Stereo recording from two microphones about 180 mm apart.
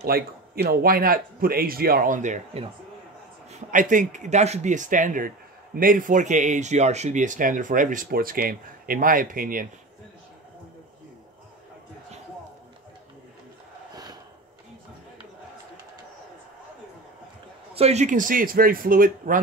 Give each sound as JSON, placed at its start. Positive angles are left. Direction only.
{"t": 0.0, "sound": "speech", "side_deg": -60}
{"t": 17.7, "sound": "speech", "side_deg": -35}